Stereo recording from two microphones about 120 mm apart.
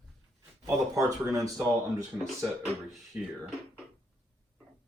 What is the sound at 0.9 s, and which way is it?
Speech, 30° right (ahead or behind).